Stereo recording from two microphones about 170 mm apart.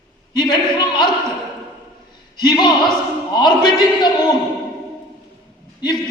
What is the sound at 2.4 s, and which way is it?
A man's voice, 25° left (ahead or behind).